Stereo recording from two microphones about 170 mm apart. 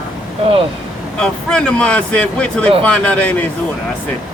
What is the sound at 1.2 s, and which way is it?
Speech, 5° left (ahead or behind).